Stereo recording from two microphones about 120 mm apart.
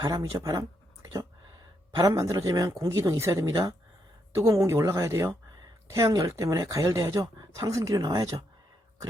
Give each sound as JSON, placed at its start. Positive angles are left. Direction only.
{"t": 0.0, "sound": "speech", "side_deg": -30}
{"t": 2.0, "sound": "speech", "side_deg": -30}